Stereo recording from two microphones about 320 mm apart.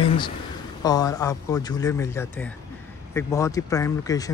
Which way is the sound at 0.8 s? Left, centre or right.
Centre.